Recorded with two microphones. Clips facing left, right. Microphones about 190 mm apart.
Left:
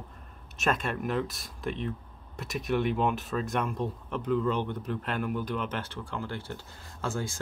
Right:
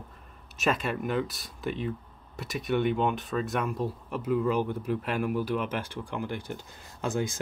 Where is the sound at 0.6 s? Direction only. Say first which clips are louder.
Right 1 dB; centre (ahead or behind).